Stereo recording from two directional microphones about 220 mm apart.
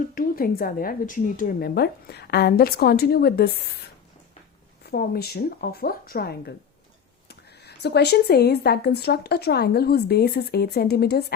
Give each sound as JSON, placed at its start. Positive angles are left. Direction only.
{"t": 0.1, "sound": "speech", "side_deg": 40}
{"t": 4.9, "sound": "speech", "side_deg": 45}